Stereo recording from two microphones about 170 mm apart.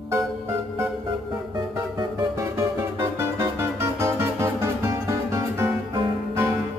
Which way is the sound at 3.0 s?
15° right (ahead or behind).